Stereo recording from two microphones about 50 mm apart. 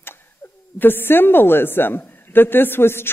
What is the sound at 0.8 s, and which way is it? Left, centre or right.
Speech, left.